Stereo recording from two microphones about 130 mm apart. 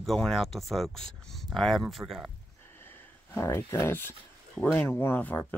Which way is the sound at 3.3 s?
20° left (ahead or behind).